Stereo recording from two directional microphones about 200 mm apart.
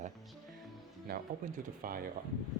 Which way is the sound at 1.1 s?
50° right (ahead or behind).